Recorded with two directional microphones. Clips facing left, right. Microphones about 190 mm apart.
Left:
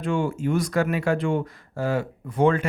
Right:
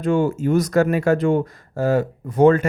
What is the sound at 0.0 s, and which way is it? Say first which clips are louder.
Speech: right 6 dB; 40° right (ahead or behind).